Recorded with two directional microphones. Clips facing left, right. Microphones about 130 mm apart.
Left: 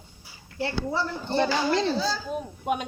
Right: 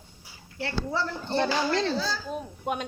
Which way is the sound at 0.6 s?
15° left (ahead or behind).